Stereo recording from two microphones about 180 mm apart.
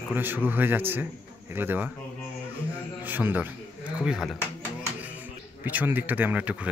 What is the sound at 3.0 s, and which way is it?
Speech, 10° right (ahead or behind).